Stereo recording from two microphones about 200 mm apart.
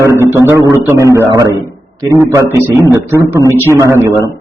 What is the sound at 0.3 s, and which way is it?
A man's voice, 15° right (ahead or behind).